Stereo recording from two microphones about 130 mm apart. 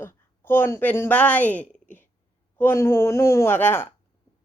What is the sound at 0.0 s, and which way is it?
A woman's voice, 15° left (ahead or behind).